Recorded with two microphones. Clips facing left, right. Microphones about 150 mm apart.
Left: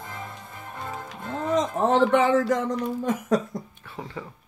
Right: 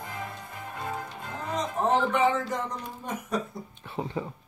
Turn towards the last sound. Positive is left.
turn(degrees=-20)  # may be behind; listen again after turning